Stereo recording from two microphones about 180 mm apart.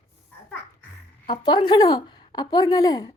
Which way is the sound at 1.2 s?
25° left (ahead or behind).